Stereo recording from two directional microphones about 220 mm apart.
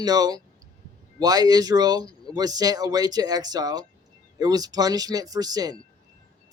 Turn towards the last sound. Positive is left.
turn(degrees=-15)  # may be behind; listen again after turning